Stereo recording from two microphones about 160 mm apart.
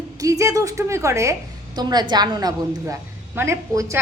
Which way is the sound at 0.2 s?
20° right (ahead or behind).